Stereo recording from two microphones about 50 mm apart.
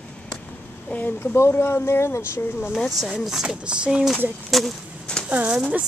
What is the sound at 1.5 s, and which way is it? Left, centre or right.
Speech, left.